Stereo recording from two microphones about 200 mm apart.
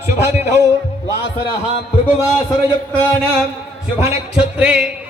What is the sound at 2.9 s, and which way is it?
Speech, 5° left (ahead or behind).